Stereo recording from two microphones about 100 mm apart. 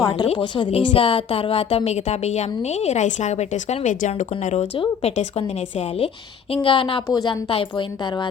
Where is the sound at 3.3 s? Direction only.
90° left.